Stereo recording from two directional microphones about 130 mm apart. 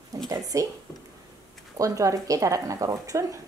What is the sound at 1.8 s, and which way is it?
A woman's voice, 25° right (ahead or behind).